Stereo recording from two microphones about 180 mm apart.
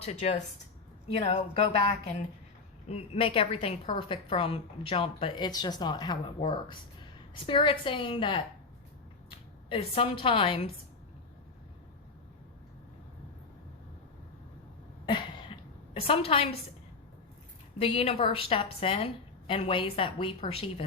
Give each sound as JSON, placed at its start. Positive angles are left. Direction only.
{"t": 0.0, "sound": "a woman's voice", "side_deg": 40}
{"t": 2.8, "sound": "a woman's voice", "side_deg": 35}
{"t": 9.6, "sound": "a woman's voice", "side_deg": 30}
{"t": 15.0, "sound": "cough", "side_deg": 25}
{"t": 16.0, "sound": "a woman's voice", "side_deg": 30}
{"t": 17.7, "sound": "a woman's voice", "side_deg": 30}